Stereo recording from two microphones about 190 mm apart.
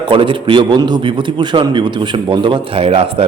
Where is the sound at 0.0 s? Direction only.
25° right (ahead or behind).